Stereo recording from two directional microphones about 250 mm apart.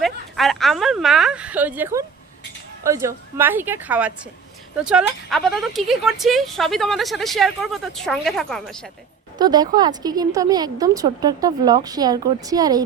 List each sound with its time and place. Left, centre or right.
0.0 s speech: centre
9.4 s speech: centre